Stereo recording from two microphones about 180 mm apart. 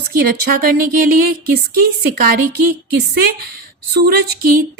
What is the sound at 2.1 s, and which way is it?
Speech, 55° right (ahead or behind).